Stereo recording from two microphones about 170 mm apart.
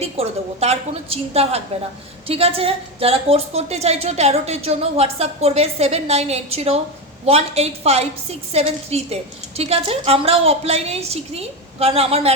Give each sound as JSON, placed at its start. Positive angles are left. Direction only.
{"t": 0.0, "sound": "a woman's voice", "side_deg": -35}